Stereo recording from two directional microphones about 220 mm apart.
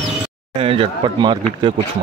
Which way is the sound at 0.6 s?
25° right (ahead or behind).